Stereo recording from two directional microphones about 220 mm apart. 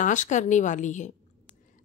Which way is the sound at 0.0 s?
35° left (ahead or behind).